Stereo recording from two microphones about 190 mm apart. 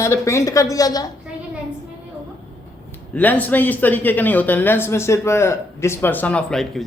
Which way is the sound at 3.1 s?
10° left (ahead or behind).